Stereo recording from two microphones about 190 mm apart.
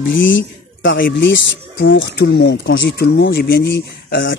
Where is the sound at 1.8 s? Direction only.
80° left.